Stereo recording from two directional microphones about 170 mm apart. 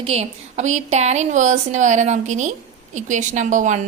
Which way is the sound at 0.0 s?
35° right (ahead or behind).